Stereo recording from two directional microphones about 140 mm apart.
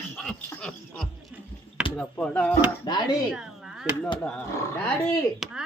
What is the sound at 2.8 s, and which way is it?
Speech, 30° left (ahead or behind).